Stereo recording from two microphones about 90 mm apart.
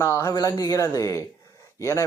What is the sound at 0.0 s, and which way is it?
Speech, 35° left (ahead or behind).